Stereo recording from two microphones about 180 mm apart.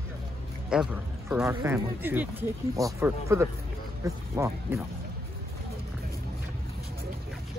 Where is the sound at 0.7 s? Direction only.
5° right (ahead or behind).